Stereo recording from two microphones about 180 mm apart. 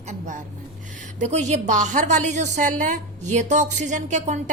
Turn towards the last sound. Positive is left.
turn(degrees=-40)  # may be behind; listen again after turning